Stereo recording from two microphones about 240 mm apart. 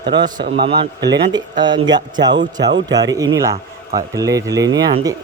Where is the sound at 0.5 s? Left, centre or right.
Right.